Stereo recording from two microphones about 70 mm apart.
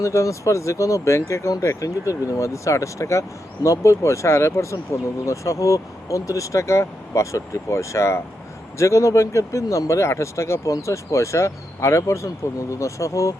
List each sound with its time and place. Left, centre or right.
0.0 s speech: left